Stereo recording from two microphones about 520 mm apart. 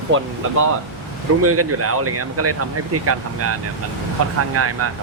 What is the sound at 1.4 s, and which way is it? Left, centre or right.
Speech, right.